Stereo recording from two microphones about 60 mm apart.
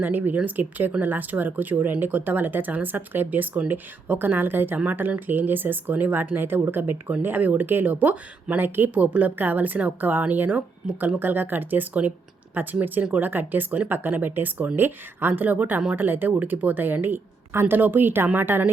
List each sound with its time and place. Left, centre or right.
0.0 s speech: right
9.0 s speech: right